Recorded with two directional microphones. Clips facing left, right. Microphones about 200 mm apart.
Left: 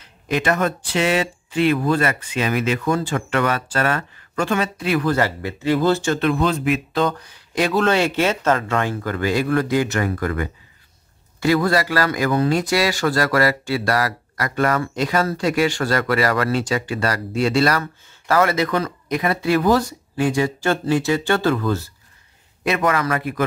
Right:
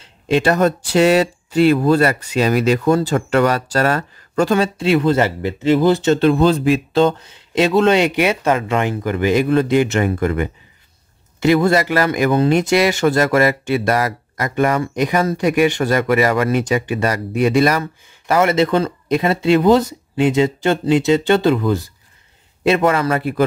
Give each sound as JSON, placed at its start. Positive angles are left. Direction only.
{"t": 0.0, "sound": "speech", "side_deg": -30}
{"t": 6.1, "sound": "speech", "side_deg": -30}
{"t": 22.6, "sound": "speech", "side_deg": -30}